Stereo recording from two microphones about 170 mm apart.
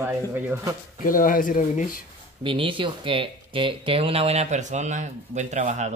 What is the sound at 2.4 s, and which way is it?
Speech, 30° right (ahead or behind).